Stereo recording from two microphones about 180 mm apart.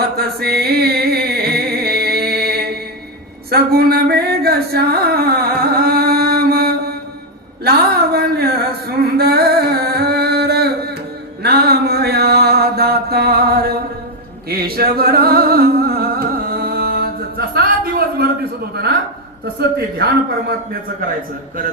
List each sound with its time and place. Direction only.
0.2 s music: 60° right (ahead or behind)
3.5 s singing: 60° right (ahead or behind)
7.6 s a sound: 60° right (ahead or behind)
11.4 s mantra: 60° right (ahead or behind)
14.5 s music: 60° right (ahead or behind)
19.5 s a man's voice: 60° right (ahead or behind)